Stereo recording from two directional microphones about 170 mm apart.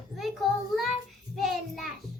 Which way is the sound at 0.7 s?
Centre (ahead or behind).